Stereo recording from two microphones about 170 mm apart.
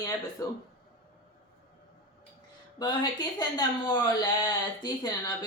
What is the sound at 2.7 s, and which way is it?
Speech, 25° left (ahead or behind).